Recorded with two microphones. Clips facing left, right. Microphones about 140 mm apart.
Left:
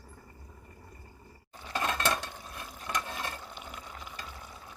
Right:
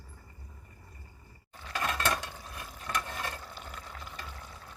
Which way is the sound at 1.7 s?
25° left (ahead or behind).